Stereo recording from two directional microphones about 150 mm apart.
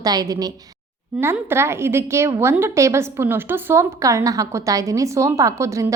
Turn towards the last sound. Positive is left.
turn(degrees=-20)  # may be behind; listen again after turning